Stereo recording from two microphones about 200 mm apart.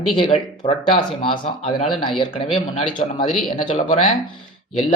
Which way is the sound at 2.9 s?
40° left (ahead or behind).